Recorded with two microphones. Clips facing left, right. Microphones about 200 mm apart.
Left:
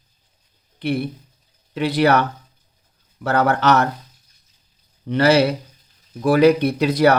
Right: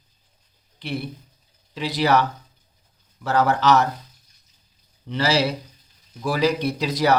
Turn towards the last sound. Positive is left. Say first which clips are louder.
# left 5 dB
turn(degrees=60)  # may be behind; listen again after turning